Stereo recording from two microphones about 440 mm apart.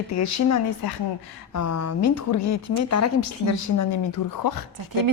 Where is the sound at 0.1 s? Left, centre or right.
Left.